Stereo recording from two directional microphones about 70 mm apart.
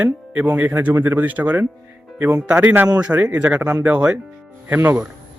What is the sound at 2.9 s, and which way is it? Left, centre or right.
Speech, centre.